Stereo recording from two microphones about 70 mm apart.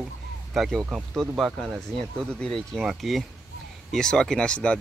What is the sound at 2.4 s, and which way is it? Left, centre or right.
Speech, centre.